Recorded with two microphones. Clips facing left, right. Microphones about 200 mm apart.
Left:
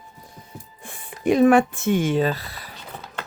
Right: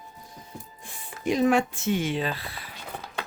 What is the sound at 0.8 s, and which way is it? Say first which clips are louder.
Speech: left 7 dB; 55° left (ahead or behind).